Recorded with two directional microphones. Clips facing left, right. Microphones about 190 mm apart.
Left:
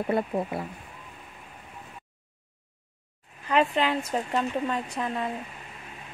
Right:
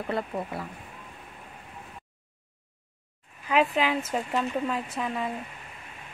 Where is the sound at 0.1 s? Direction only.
25° left (ahead or behind).